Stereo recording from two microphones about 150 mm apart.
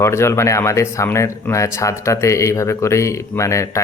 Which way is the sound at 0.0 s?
20° left (ahead or behind).